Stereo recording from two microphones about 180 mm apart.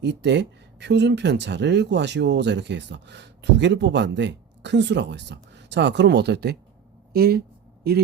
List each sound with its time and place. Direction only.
0.0 s speech: 75° right (ahead or behind)